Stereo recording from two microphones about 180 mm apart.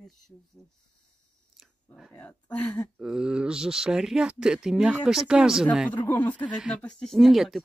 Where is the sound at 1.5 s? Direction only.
Centre (ahead or behind).